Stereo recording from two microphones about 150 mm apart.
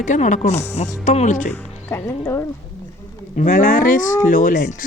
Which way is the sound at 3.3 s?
60° left (ahead or behind).